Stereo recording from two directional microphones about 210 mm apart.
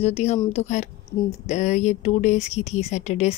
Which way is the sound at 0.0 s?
30° left (ahead or behind).